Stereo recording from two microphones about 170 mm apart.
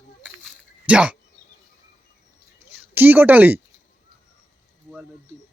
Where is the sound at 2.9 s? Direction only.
10° right (ahead or behind).